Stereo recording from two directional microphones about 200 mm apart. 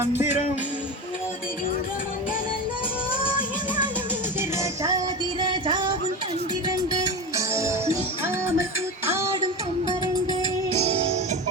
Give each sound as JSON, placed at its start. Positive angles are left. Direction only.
{"t": 0.0, "sound": "music", "side_deg": -10}
{"t": 4.4, "sound": "music", "side_deg": -15}
{"t": 5.5, "sound": "music", "side_deg": -25}
{"t": 10.8, "sound": "music", "side_deg": -35}